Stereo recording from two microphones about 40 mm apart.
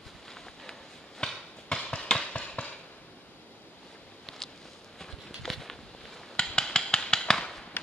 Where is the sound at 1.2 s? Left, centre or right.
Centre.